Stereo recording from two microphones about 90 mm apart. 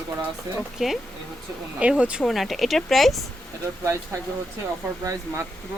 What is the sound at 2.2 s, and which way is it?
Speech, centre (ahead or behind).